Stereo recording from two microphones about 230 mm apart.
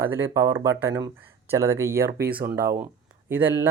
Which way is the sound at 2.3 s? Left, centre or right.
Right.